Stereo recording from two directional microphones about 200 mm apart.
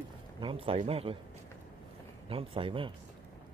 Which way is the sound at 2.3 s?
25° right (ahead or behind).